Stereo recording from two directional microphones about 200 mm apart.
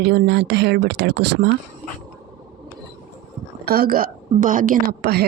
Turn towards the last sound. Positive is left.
turn(degrees=-50)  # may be behind; listen again after turning